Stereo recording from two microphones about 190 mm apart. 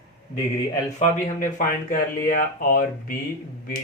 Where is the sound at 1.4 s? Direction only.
45° left (ahead or behind).